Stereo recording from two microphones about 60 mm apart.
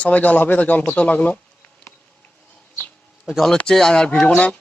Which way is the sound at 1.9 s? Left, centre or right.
Left.